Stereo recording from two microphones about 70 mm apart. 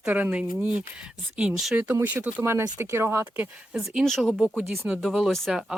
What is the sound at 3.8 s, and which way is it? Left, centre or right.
Speech, centre.